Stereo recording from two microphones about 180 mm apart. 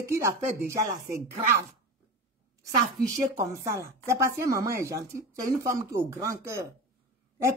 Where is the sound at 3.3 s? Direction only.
15° right (ahead or behind).